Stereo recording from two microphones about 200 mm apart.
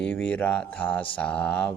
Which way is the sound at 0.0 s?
5° left (ahead or behind).